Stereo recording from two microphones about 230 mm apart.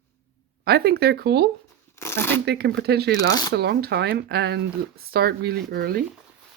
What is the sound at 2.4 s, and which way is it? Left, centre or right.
Speech, right.